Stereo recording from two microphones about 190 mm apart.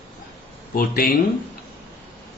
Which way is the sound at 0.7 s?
50° left (ahead or behind).